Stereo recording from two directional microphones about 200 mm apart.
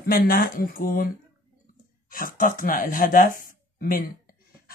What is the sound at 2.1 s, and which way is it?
Speech, 40° left (ahead or behind).